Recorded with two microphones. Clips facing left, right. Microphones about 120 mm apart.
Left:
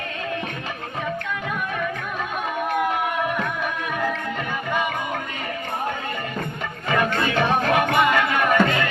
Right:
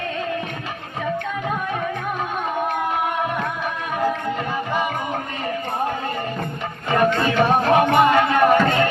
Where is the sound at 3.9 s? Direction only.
30° right (ahead or behind).